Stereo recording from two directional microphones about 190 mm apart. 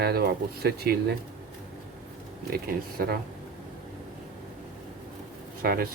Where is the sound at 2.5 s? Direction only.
55° right (ahead or behind).